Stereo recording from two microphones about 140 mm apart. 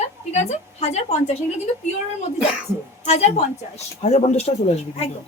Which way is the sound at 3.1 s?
50° left (ahead or behind).